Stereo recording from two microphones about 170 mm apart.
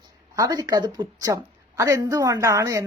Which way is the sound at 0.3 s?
20° right (ahead or behind).